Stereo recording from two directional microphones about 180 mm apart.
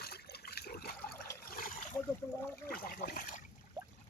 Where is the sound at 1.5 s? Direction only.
50° left (ahead or behind).